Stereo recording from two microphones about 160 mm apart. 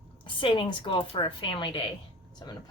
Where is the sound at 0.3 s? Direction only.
30° left (ahead or behind).